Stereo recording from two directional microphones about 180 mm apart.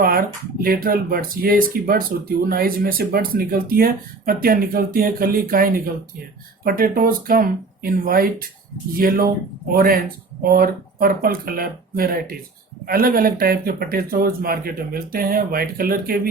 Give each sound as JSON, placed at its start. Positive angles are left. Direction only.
{"t": 0.0, "sound": "speech", "side_deg": -55}